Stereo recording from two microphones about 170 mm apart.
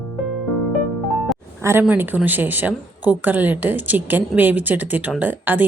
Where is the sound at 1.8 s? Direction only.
10° right (ahead or behind).